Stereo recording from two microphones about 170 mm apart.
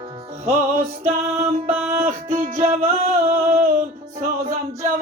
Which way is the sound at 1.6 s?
45° right (ahead or behind).